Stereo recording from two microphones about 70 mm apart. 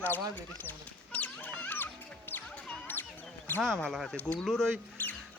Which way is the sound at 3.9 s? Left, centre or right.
Centre.